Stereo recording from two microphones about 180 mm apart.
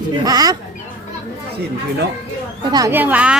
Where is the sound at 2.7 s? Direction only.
15° right (ahead or behind).